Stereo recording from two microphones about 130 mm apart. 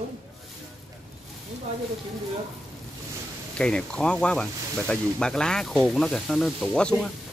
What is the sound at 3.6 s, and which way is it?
Speech, 5° left (ahead or behind).